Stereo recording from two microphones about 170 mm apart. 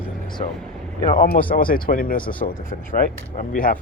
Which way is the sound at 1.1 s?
55° left (ahead or behind).